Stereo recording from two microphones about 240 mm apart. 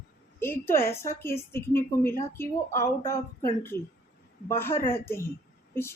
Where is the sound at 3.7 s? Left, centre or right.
Left.